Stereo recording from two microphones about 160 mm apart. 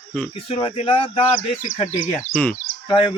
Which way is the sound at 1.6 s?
50° left (ahead or behind).